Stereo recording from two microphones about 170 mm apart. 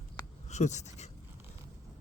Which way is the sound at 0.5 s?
45° left (ahead or behind).